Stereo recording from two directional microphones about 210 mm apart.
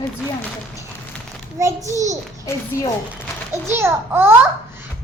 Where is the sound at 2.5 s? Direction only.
15° left (ahead or behind).